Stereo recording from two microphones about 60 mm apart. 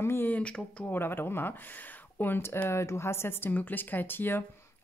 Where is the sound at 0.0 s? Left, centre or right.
Left.